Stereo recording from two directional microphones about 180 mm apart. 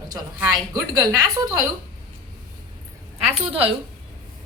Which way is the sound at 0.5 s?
20° right (ahead or behind).